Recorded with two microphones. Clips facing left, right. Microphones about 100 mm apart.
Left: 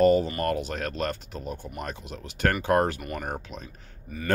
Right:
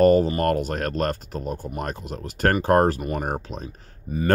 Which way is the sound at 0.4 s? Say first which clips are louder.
Right 5 dB; 45° right (ahead or behind).